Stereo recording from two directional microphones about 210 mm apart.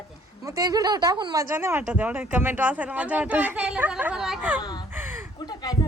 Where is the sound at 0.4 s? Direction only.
15° right (ahead or behind).